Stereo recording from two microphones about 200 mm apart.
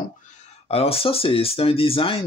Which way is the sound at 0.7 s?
30° left (ahead or behind).